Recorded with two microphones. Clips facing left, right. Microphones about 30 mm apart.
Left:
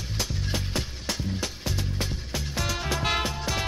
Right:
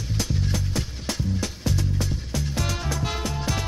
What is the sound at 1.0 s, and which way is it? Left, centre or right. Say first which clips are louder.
Music: right 2 dB; centre.